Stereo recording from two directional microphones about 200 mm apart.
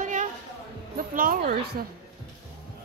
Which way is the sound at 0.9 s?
45° right (ahead or behind).